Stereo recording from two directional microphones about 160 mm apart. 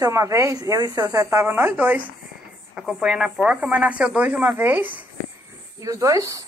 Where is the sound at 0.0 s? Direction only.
20° right (ahead or behind).